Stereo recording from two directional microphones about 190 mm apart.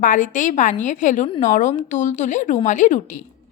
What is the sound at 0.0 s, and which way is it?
A woman's voice, 45° left (ahead or behind).